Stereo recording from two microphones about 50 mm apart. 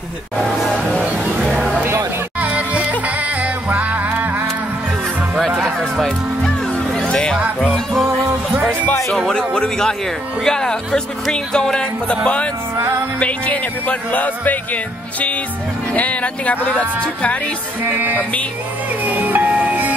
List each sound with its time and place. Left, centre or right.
1.4 s a sound: centre
2.4 s music: right
6.0 s music: centre
7.7 s music: centre
9.3 s music: centre
13.2 s speech: left
17.8 s music: right